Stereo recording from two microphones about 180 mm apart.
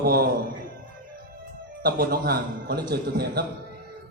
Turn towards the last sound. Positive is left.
turn(degrees=-60)  # may be behind; listen again after turning